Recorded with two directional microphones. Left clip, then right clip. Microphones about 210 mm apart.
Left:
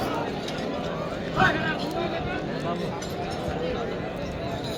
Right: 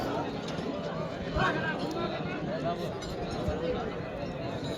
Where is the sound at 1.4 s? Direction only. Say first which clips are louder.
Left 8 dB; centre (ahead or behind).